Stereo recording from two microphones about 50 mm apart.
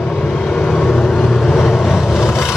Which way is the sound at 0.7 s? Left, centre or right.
Centre.